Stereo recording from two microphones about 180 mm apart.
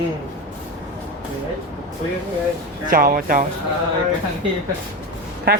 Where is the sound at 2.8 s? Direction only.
50° right (ahead or behind).